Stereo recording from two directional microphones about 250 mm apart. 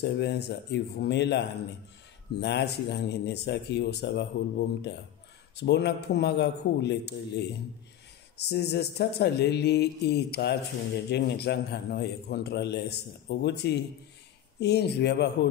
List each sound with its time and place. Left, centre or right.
0.0 s speech: left
2.4 s a man's voice: left